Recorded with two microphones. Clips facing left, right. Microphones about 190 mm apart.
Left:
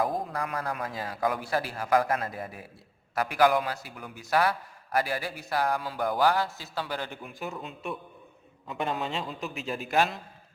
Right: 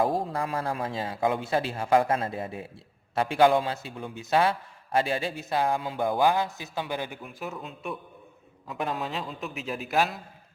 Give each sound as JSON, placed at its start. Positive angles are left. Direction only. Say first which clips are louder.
{"t": 0.0, "sound": "a man's voice", "louder": "right 3 dB", "side_deg": -30}
{"t": 7.2, "sound": "a man's voice", "louder": "even", "side_deg": 0}